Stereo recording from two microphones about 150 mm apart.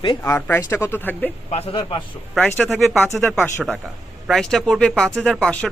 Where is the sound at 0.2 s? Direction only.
15° left (ahead or behind).